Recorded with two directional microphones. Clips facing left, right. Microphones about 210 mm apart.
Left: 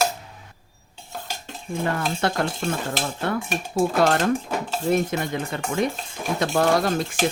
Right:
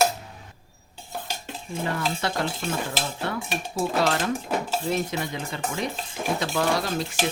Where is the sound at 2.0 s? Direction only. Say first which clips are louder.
Left 3 dB; 50° left (ahead or behind).